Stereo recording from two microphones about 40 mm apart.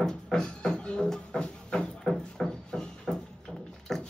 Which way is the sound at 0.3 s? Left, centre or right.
Centre.